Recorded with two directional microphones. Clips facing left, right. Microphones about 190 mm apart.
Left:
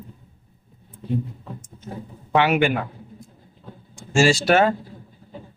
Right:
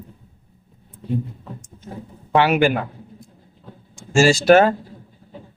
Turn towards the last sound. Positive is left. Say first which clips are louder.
# right 4 dB
turn(degrees=-45)  # may be behind; listen again after turning